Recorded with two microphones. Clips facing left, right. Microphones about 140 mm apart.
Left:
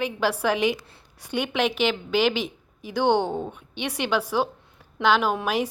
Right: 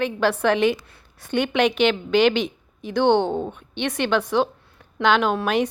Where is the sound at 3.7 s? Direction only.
10° left (ahead or behind).